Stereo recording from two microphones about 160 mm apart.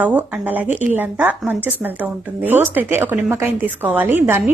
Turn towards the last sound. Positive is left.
turn(degrees=-15)  # may be behind; listen again after turning